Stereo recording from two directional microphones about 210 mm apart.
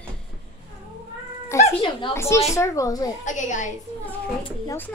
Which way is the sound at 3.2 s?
35° left (ahead or behind).